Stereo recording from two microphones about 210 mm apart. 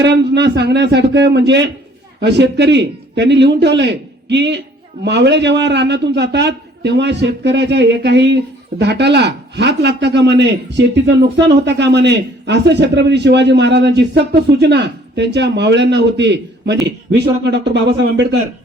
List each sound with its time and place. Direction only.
0.0 s a man's voice: 55° right (ahead or behind)